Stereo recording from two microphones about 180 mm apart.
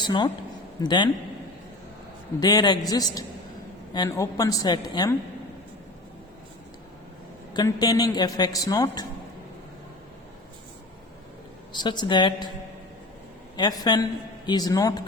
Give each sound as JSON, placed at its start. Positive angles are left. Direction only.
{"t": 0.0, "sound": "a woman's voice", "side_deg": 25}
{"t": 2.4, "sound": "a man's voice", "side_deg": 20}
{"t": 7.5, "sound": "a man's voice", "side_deg": 20}
{"t": 11.7, "sound": "a man's voice", "side_deg": 25}
{"t": 13.6, "sound": "a man's voice", "side_deg": 20}